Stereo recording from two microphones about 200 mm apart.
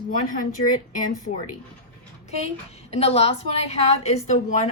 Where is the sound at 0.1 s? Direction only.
40° left (ahead or behind).